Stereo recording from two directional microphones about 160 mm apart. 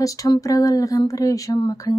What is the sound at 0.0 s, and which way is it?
Speech, 20° left (ahead or behind).